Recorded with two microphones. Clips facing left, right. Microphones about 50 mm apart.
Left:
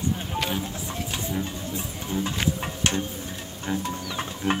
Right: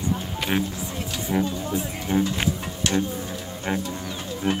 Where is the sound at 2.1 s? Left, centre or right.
Right.